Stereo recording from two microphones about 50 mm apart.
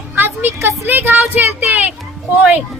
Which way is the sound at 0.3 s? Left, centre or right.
Right.